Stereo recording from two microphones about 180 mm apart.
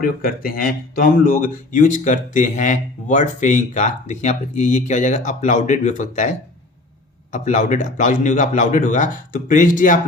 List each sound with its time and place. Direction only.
0.0 s speech: 50° left (ahead or behind)